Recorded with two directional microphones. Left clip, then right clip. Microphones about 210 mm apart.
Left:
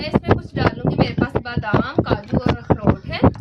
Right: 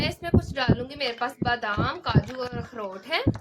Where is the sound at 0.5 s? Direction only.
45° right (ahead or behind).